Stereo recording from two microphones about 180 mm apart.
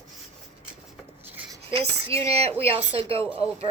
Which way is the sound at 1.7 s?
30° right (ahead or behind).